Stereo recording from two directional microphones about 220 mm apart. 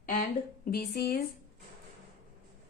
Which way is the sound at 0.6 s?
45° left (ahead or behind).